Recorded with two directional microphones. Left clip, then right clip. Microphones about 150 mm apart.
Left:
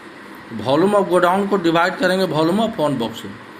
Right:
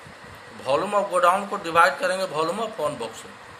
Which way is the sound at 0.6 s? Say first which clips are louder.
Left 6 dB; 20° left (ahead or behind).